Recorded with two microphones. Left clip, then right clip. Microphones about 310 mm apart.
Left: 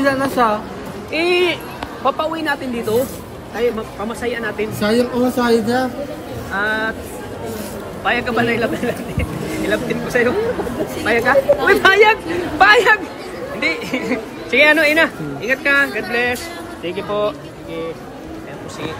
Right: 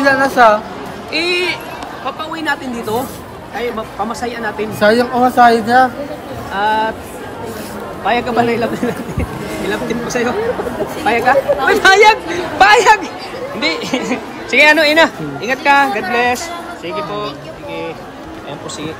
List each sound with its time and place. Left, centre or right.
0.0 s a sound: right
1.1 s speech: centre
4.2 s a woman's voice: centre
8.0 s a woman's voice: centre
9.5 s music: centre
9.9 s a woman's voice: centre